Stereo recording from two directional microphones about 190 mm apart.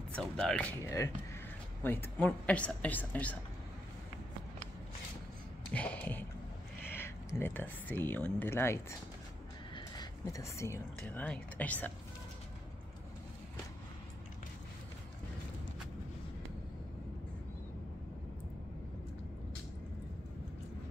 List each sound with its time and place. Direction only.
0.1 s a woman's voice: 5° left (ahead or behind)
5.7 s a woman's voice: 5° left (ahead or behind)
9.8 s a sound: 20° left (ahead or behind)
11.0 s a woman's voice: 5° left (ahead or behind)